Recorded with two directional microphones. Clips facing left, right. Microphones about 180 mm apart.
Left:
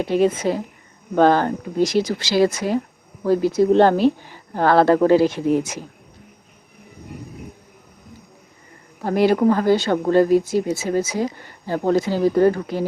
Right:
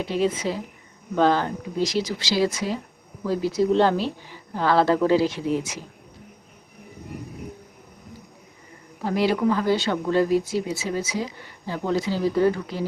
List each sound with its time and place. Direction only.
0.0 s speech: 50° left (ahead or behind)
9.0 s speech: 50° left (ahead or behind)